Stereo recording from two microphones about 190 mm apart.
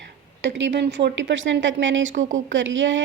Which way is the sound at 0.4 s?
65° right (ahead or behind).